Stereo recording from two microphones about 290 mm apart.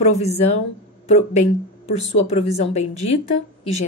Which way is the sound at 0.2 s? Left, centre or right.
Left.